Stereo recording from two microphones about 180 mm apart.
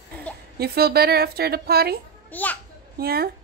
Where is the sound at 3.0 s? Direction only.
60° right (ahead or behind).